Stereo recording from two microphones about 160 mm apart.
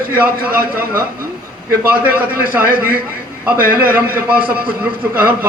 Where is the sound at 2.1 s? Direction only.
65° right (ahead or behind).